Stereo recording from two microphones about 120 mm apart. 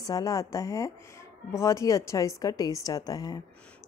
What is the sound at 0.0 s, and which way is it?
A woman's voice, 30° left (ahead or behind).